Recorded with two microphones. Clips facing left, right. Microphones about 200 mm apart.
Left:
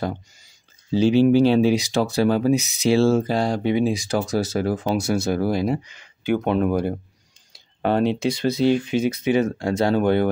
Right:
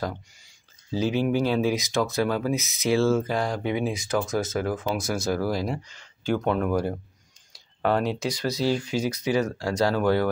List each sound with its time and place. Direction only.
0.9 s speech: 30° left (ahead or behind)
4.9 s speech: 65° left (ahead or behind)
5.3 s speech: 25° left (ahead or behind)